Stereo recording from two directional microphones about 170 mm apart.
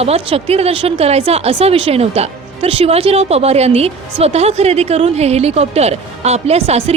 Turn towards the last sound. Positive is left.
turn(degrees=-35)  # may be behind; listen again after turning